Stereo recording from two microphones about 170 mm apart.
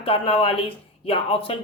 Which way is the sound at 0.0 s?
35° left (ahead or behind).